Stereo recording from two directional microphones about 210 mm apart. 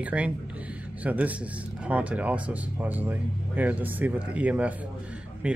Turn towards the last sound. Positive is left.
turn(degrees=-5)  # may be behind; listen again after turning